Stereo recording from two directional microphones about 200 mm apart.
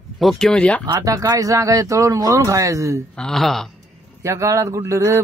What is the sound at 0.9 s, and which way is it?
Speech, 15° right (ahead or behind).